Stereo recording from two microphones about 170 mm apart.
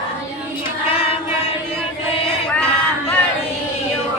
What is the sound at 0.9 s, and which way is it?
Choir, 35° left (ahead or behind).